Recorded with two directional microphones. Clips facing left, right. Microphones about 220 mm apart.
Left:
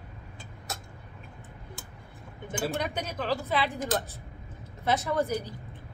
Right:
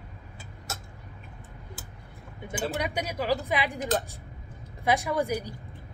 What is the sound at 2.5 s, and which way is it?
Speech, 10° right (ahead or behind).